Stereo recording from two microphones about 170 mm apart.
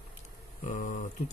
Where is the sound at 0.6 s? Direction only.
50° left (ahead or behind).